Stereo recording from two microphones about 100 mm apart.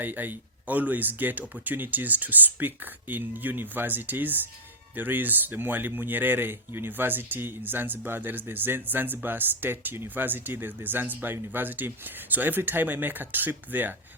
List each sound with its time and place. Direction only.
0.0 s speech: 20° right (ahead or behind)